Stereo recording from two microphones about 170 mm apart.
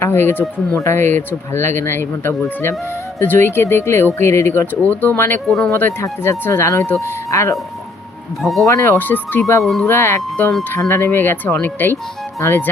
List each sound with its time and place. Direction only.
0.0 s speech: 15° left (ahead or behind)
5.5 s speech: centre (ahead or behind)
5.7 s speech: 15° left (ahead or behind)
8.4 s speech: centre (ahead or behind)
8.6 s speech: 15° left (ahead or behind)